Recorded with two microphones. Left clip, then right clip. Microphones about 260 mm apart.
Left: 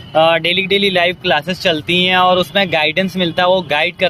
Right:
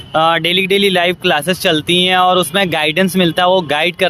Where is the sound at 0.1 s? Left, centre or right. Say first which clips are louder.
Even; right.